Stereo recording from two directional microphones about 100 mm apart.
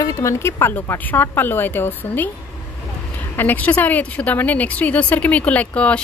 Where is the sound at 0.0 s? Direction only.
30° left (ahead or behind).